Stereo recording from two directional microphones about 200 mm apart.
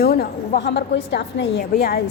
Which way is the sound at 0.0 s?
50° left (ahead or behind).